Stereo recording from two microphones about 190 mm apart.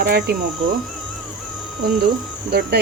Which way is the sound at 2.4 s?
55° right (ahead or behind).